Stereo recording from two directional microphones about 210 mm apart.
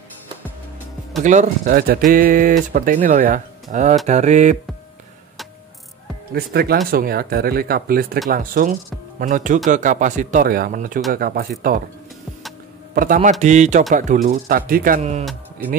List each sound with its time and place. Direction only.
1.2 s speech: 35° right (ahead or behind)
6.3 s speech: 45° right (ahead or behind)
12.9 s speech: 40° right (ahead or behind)
15.0 s speech: 30° right (ahead or behind)